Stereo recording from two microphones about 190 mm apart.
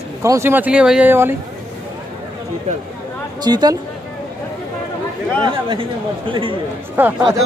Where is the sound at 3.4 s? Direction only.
20° right (ahead or behind).